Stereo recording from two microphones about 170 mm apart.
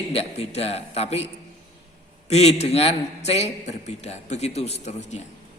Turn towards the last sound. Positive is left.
turn(degrees=40)  # may be behind; listen again after turning